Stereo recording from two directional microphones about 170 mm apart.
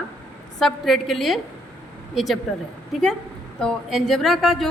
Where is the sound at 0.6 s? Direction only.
Centre (ahead or behind).